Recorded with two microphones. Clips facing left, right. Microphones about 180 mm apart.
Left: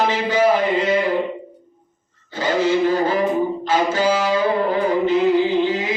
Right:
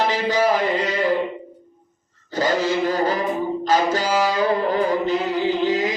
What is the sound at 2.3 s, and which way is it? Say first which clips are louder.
Music: left 2 dB; 40° right (ahead or behind).